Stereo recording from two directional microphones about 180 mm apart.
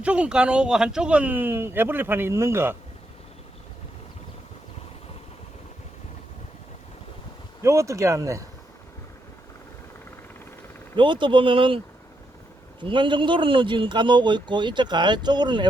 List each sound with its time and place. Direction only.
0.0 s speech: 5° right (ahead or behind)
7.6 s speech: 15° right (ahead or behind)
10.9 s a man's voice: 25° right (ahead or behind)
12.8 s a man's voice: 25° right (ahead or behind)